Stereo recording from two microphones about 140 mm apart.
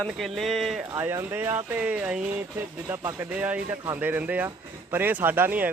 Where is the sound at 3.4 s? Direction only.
10° right (ahead or behind).